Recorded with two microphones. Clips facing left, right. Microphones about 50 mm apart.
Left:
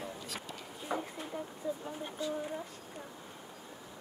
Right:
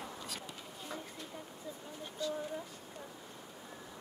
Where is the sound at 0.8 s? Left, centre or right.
Left.